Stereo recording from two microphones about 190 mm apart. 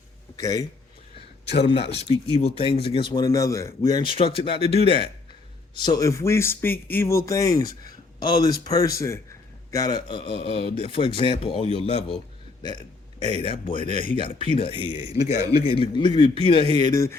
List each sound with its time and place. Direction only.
0.3 s speech: 20° left (ahead or behind)
1.9 s a man's voice: 30° left (ahead or behind)
13.2 s speech: 25° left (ahead or behind)
14.7 s speech: 25° right (ahead or behind)
15.3 s speech: 30° left (ahead or behind)